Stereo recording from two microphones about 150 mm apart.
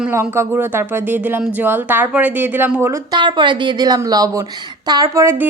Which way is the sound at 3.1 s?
30° right (ahead or behind).